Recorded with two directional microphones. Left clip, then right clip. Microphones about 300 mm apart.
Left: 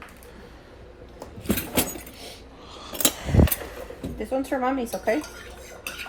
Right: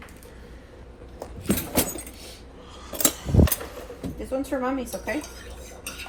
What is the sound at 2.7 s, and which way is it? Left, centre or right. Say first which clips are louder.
Scissors: left 1 dB; centre.